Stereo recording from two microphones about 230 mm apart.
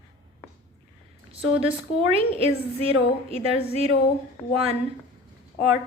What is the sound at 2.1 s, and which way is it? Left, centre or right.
A woman's voice, right.